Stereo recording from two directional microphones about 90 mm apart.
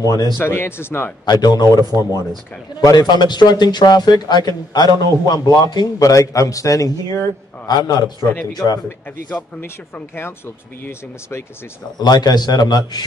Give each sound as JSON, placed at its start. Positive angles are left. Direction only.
{"t": 0.0, "sound": "a man's voice", "side_deg": 45}
{"t": 0.4, "sound": "speech", "side_deg": 25}
{"t": 1.2, "sound": "a man's voice", "side_deg": 50}
{"t": 8.6, "sound": "speech", "side_deg": 25}
{"t": 12.0, "sound": "a man's voice", "side_deg": 50}